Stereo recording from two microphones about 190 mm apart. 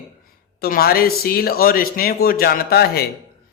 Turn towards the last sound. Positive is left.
turn(degrees=55)  # may be behind; listen again after turning